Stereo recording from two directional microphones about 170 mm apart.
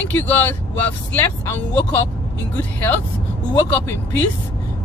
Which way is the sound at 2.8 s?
10° left (ahead or behind).